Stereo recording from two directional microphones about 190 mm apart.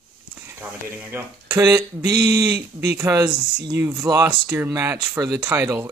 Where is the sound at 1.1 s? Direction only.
10° right (ahead or behind).